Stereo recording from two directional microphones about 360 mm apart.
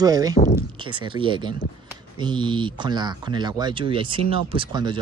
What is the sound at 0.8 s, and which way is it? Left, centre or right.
Speech, centre.